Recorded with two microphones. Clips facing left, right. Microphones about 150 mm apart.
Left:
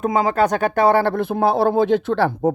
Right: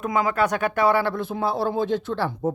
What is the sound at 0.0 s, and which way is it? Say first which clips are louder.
Speech: left 5 dB; 35° left (ahead or behind).